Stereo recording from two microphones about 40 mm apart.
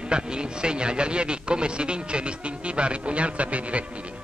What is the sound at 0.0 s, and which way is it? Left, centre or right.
A man's voice, right.